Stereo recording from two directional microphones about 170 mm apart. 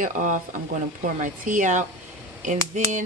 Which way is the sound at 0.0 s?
50° right (ahead or behind).